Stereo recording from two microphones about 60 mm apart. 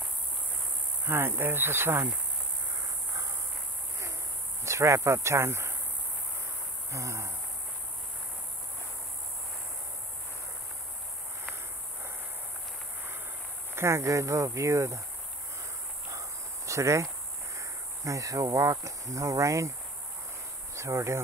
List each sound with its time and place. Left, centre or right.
1.0 s speech: right
4.6 s speech: right
6.9 s speech: right
13.7 s speech: right
16.1 s a sound: right
17.6 s speech: right
20.7 s speech: right